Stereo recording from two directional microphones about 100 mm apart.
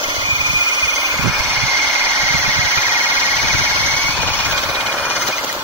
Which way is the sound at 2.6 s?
30° right (ahead or behind).